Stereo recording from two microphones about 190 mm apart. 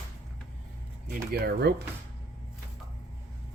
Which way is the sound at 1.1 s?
55° right (ahead or behind).